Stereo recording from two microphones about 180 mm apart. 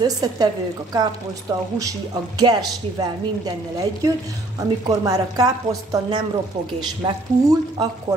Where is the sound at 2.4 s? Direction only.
20° right (ahead or behind).